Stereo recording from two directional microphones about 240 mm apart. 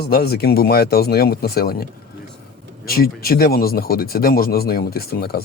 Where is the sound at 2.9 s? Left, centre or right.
Left.